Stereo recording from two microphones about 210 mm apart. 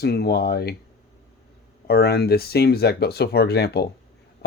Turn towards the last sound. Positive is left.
turn(degrees=50)  # may be behind; listen again after turning